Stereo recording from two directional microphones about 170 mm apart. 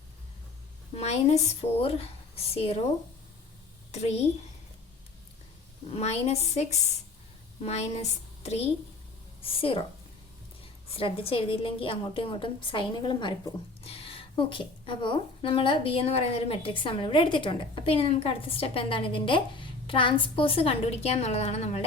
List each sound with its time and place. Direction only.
0.9 s a woman's voice: 40° left (ahead or behind)
3.9 s a woman's voice: 40° left (ahead or behind)
5.9 s a woman's voice: 40° left (ahead or behind)
9.4 s a woman's voice: 35° left (ahead or behind)
10.9 s a woman's voice: 35° left (ahead or behind)